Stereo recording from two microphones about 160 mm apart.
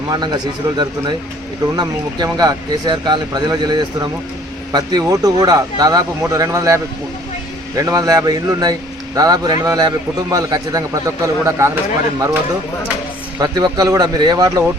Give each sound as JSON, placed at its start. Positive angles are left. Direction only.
{"t": 0.1, "sound": "speech", "side_deg": -25}
{"t": 13.4, "sound": "speech", "side_deg": -25}